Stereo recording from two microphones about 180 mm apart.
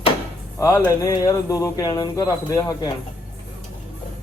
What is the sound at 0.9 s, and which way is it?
A man's voice, 20° left (ahead or behind).